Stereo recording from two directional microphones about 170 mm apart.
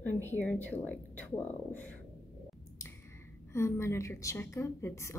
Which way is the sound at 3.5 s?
15° left (ahead or behind).